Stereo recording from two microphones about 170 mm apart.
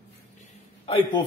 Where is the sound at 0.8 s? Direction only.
30° left (ahead or behind).